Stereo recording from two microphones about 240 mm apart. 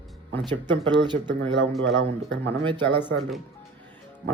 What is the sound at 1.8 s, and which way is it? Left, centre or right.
Speech, right.